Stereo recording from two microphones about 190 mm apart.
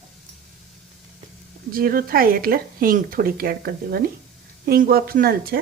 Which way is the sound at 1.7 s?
50° right (ahead or behind).